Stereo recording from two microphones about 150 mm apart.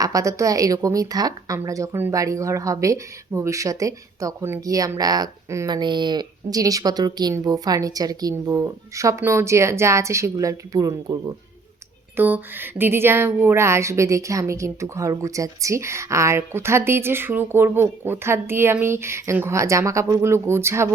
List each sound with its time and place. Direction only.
0.0 s a woman's voice: 20° right (ahead or behind)
12.1 s speech: 15° right (ahead or behind)